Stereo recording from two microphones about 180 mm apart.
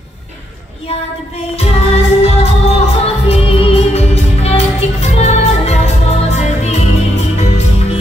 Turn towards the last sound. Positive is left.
turn(degrees=35)  # may be behind; listen again after turning